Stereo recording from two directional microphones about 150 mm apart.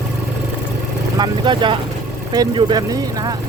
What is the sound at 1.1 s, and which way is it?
Speech, 30° right (ahead or behind).